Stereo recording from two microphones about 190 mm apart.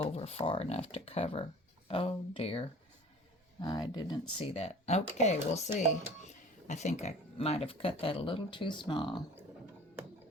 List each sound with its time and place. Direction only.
0.0 s speech: 35° left (ahead or behind)